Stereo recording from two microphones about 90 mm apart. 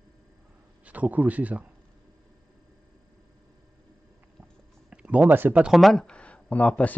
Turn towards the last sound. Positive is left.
turn(degrees=15)  # may be behind; listen again after turning